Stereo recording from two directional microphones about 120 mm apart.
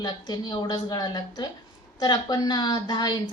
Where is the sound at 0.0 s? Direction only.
35° left (ahead or behind).